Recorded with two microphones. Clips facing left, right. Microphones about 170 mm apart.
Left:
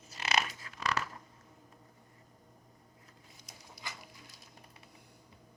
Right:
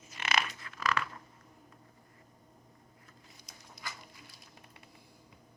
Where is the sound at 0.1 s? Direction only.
35° left (ahead or behind).